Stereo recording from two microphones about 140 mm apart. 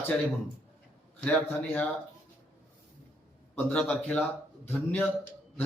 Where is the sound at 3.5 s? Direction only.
10° left (ahead or behind).